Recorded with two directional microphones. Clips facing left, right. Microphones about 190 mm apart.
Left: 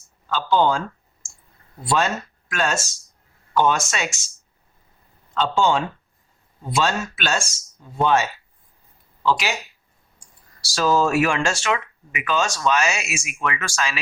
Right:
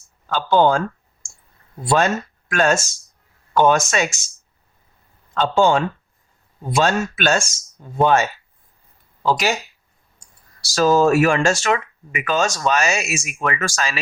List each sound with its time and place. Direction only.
0.3 s speech: 50° right (ahead or behind)
1.9 s speech: 50° right (ahead or behind)
5.3 s speech: 50° right (ahead or behind)
10.8 s speech: 45° right (ahead or behind)